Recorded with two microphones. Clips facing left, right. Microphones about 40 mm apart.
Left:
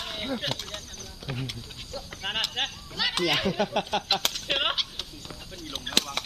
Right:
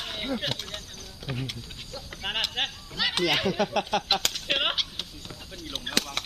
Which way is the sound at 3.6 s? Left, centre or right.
Right.